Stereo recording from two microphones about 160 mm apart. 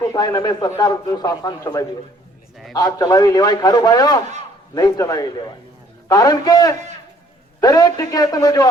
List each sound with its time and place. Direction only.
0.1 s a man's voice: 25° left (ahead or behind)